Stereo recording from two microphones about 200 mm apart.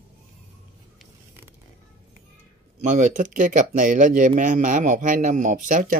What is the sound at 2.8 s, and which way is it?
Speech, 40° right (ahead or behind).